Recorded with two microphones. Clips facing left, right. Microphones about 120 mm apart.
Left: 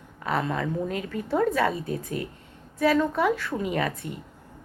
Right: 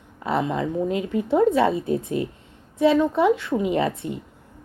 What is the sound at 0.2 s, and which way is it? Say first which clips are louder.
Speech: right 3 dB; 20° right (ahead or behind).